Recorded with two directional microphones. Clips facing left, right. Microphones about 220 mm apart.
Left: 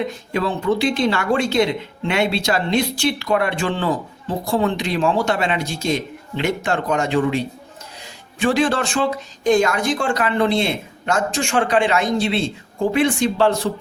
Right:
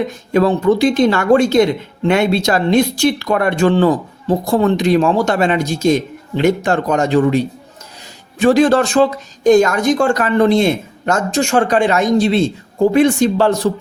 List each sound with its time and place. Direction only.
0.1 s speech: 45° right (ahead or behind)